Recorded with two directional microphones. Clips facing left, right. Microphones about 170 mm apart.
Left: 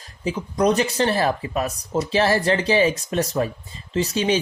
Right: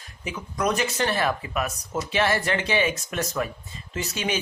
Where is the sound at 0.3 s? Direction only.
30° left (ahead or behind).